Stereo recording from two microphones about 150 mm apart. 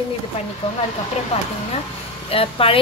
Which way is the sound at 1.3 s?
45° left (ahead or behind).